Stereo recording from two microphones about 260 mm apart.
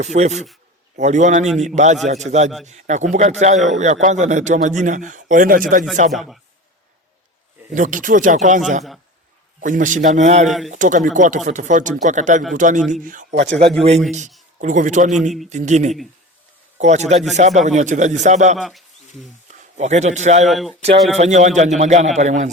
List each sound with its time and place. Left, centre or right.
0.0 s a man's voice: right
6.1 s a man's voice: centre
7.8 s a man's voice: right
18.5 s a man's voice: centre
19.7 s a man's voice: right
20.5 s a man's voice: centre
21.2 s a man's voice: right